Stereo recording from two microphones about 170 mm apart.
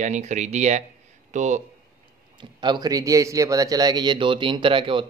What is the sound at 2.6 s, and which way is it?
A man's voice, 25° right (ahead or behind).